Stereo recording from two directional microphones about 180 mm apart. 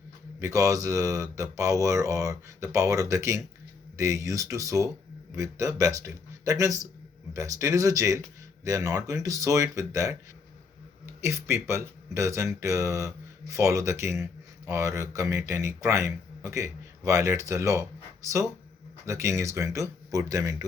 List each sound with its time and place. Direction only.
0.3 s a man's voice: 15° right (ahead or behind)